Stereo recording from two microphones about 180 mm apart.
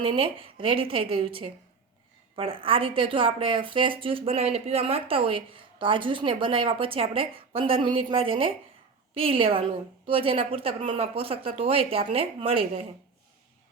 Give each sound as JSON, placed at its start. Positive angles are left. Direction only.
{"t": 0.0, "sound": "a woman's voice", "side_deg": -30}